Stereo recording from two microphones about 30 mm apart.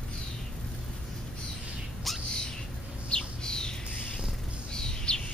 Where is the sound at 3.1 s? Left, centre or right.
Left.